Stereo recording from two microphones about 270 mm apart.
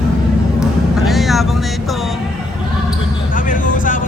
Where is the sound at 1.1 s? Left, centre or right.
Centre.